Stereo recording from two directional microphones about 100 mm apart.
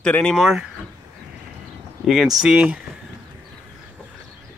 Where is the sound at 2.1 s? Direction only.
5° right (ahead or behind).